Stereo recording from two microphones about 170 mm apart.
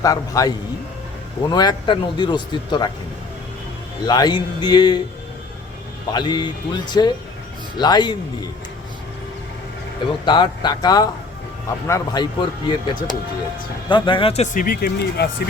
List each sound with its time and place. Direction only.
0.0 s a man's voice: 20° left (ahead or behind)
4.0 s a man's voice: 25° left (ahead or behind)
6.1 s a man's voice: 25° left (ahead or behind)
10.2 s a man's voice: 25° left (ahead or behind); by 15.4 s 65° left (ahead or behind)